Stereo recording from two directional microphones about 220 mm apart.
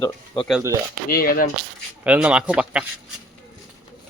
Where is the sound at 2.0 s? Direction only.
5° right (ahead or behind).